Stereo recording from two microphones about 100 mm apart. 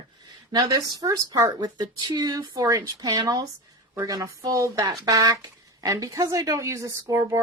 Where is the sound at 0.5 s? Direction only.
45° right (ahead or behind).